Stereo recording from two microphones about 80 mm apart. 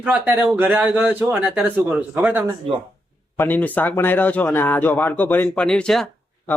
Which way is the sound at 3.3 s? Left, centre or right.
Left.